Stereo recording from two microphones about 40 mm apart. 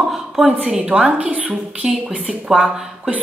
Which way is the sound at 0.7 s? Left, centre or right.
Right.